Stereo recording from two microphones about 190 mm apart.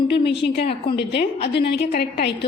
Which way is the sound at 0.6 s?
30° left (ahead or behind).